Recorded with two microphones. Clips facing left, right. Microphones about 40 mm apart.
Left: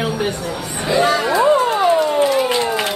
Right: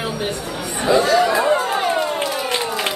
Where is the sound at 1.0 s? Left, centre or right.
Left.